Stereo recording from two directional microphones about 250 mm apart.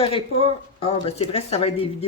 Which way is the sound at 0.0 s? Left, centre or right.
Left.